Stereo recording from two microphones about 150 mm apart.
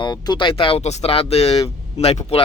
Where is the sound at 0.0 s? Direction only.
30° left (ahead or behind).